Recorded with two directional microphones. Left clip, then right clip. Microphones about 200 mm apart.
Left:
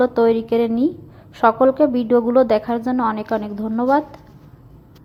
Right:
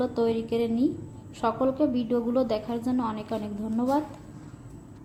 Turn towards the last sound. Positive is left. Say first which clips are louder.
# left 9 dB
turn(degrees=25)  # may be behind; listen again after turning